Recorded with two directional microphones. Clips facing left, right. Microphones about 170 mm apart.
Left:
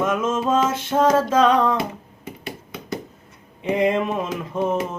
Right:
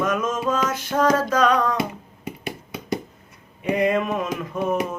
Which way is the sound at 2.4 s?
15° right (ahead or behind).